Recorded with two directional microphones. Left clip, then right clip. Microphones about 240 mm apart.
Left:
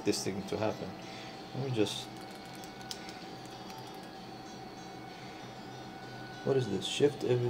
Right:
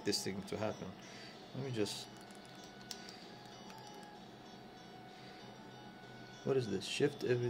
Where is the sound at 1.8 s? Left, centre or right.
Centre.